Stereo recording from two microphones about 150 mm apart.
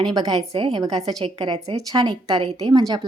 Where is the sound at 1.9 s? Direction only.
30° right (ahead or behind).